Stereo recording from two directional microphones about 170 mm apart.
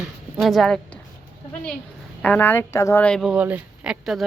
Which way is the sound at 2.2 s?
10° left (ahead or behind).